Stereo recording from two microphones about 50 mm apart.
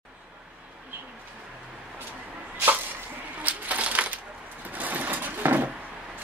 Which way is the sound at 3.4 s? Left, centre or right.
Right.